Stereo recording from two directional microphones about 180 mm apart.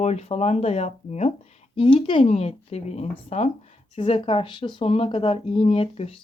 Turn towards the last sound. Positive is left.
turn(degrees=30)  # may be behind; listen again after turning